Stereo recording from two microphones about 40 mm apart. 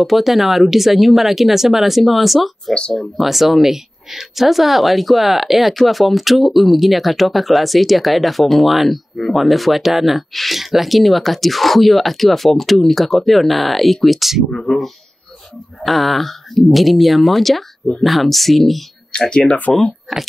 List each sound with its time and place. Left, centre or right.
0.0 s speech: centre
14.5 s speech: centre
19.1 s speech: left
20.1 s speech: centre